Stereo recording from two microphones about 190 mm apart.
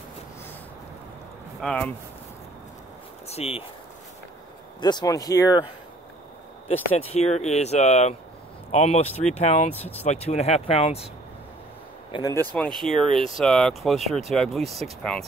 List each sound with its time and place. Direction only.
1.6 s speech: 5° left (ahead or behind)
3.3 s speech: 30° left (ahead or behind)
4.7 s speech: 25° left (ahead or behind)
6.7 s speech: 30° left (ahead or behind)
9.8 s speech: 10° left (ahead or behind)
10.0 s speech: 35° left (ahead or behind)
12.1 s speech: 20° left (ahead or behind)
12.5 s speech: 5° left (ahead or behind)